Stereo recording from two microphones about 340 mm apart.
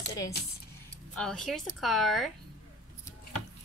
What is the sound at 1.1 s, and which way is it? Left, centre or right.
Speech, centre.